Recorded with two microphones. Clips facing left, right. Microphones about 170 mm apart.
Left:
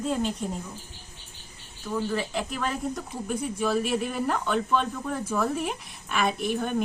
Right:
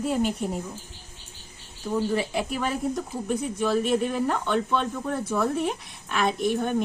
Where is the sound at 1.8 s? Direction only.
20° right (ahead or behind).